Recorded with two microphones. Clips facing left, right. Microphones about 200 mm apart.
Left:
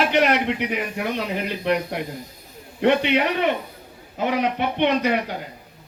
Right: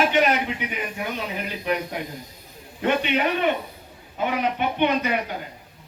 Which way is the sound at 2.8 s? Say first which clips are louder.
Left 4 dB; 85° left.